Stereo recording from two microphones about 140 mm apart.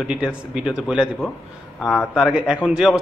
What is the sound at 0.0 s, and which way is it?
A man's voice, 5° right (ahead or behind).